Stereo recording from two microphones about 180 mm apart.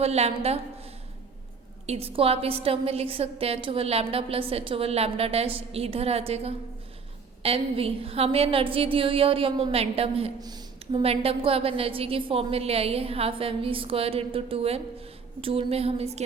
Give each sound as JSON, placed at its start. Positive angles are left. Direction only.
{"t": 0.0, "sound": "a woman's voice", "side_deg": -35}
{"t": 1.9, "sound": "a woman's voice", "side_deg": -35}
{"t": 10.4, "sound": "a sound", "side_deg": -20}
{"t": 11.0, "sound": "a woman's voice", "side_deg": -35}